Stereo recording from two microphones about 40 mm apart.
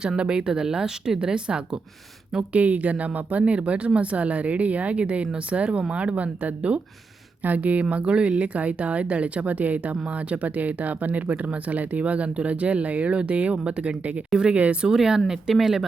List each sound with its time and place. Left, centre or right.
0.2 s speech: right
2.5 s speech: right
14.8 s speech: centre